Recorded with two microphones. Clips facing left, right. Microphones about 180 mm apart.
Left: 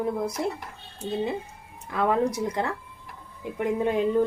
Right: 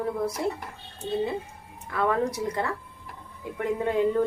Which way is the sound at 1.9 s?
20° left (ahead or behind).